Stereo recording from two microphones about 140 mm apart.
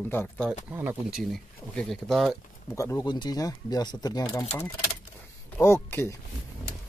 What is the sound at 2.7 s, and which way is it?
Speech, 20° left (ahead or behind).